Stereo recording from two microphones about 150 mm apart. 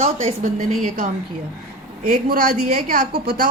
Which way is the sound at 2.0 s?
70° right (ahead or behind).